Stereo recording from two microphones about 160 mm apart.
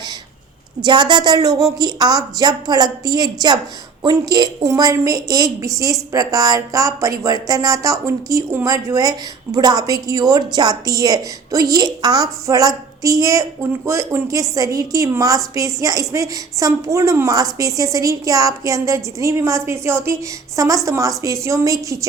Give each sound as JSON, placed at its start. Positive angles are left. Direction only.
{"t": 0.8, "sound": "a woman's voice", "side_deg": -30}